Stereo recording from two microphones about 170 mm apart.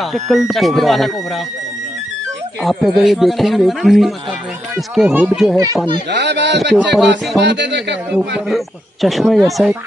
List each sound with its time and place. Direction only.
0.0 s speech: centre (ahead or behind)
2.6 s speech: centre (ahead or behind)
6.0 s speech: 90° right
8.5 s speech: centre (ahead or behind)